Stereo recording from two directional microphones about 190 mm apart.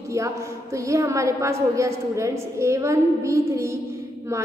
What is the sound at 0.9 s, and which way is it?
A woman's voice, 15° right (ahead or behind).